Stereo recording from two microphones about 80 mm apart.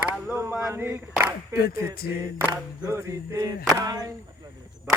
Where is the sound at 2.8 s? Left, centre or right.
Right.